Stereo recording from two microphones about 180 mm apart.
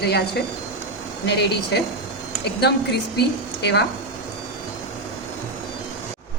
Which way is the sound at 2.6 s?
65° left (ahead or behind).